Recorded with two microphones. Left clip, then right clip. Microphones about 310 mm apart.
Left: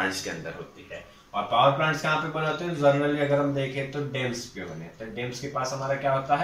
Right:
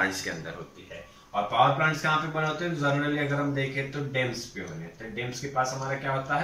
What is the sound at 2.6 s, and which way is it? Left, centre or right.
Speech, centre.